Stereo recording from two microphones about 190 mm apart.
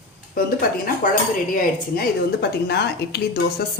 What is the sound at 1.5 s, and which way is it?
A woman's voice, 55° left (ahead or behind).